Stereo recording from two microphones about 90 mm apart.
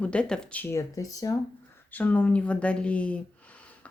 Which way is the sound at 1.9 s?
15° left (ahead or behind).